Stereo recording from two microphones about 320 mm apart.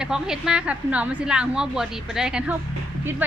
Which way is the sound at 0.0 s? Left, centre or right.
Centre.